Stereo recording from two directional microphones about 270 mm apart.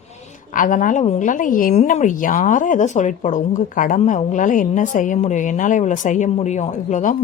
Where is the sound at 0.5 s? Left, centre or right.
Left.